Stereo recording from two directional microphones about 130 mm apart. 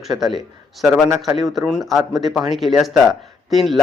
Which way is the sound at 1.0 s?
20° right (ahead or behind).